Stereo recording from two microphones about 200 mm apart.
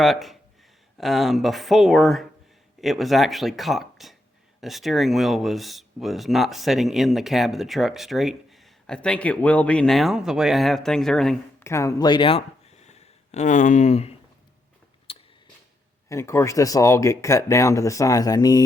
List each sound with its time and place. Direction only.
0.0 s speech: centre (ahead or behind)
11.6 s speech: 15° left (ahead or behind); by 14.1 s 35° left (ahead or behind)
15.1 s a sound: 25° left (ahead or behind)
16.0 s speech: 15° left (ahead or behind)